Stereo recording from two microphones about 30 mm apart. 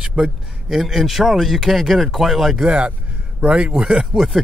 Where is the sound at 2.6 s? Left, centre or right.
Right.